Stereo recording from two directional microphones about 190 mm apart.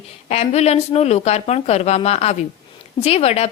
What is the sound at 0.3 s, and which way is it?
A woman's voice, 35° left (ahead or behind).